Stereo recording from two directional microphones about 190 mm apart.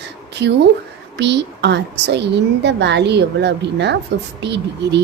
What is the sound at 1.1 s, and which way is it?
A woman's voice, 65° right (ahead or behind).